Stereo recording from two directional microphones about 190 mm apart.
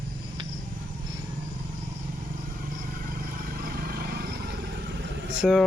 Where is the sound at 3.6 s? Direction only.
50° right (ahead or behind).